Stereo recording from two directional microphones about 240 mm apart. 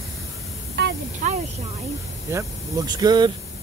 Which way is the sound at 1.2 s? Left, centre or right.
Right.